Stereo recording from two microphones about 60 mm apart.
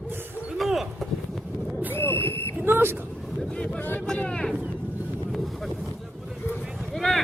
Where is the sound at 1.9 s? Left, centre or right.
Left.